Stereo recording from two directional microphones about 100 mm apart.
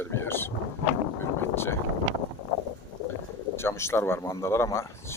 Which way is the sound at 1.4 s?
25° left (ahead or behind).